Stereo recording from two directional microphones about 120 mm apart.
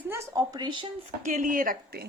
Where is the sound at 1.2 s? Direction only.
90° right.